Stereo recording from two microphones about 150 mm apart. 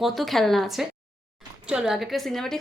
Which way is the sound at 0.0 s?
Centre (ahead or behind).